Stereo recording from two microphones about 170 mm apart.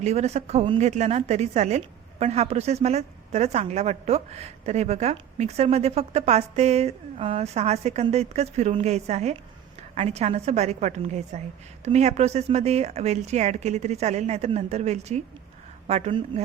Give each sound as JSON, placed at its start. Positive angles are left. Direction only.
{"t": 0.0, "sound": "speech", "side_deg": -40}